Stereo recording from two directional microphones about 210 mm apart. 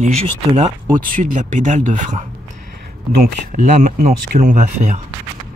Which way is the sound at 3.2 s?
40° right (ahead or behind).